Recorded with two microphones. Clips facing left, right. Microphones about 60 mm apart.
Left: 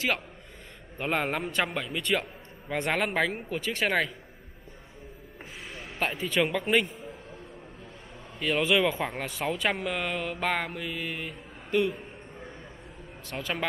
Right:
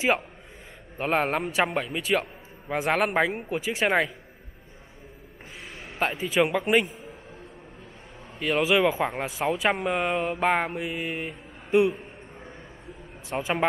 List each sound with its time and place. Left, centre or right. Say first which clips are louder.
0.9 s speech: right 4 dB; centre
5.7 s basketball bounce: right 3 dB; centre
6.4 s speech: right 4 dB; centre
8.4 s speech: right 3 dB; centre
9.6 s mantra: right 5 dB; centre
13.4 s speech: right 6 dB; centre